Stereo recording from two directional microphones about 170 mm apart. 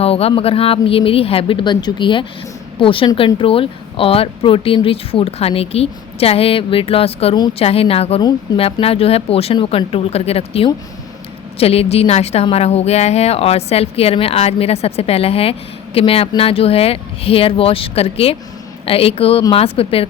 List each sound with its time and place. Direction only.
0.0 s a woman's voice: 35° left (ahead or behind)